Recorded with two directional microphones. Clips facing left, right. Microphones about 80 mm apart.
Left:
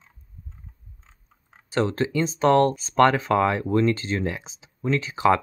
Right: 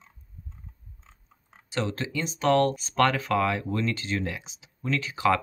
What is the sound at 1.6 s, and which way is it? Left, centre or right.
Speech, left.